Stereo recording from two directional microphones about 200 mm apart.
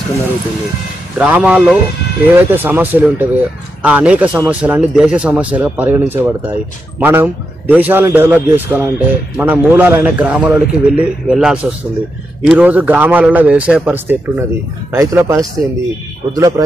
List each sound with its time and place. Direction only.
1.1 s speech: 5° right (ahead or behind)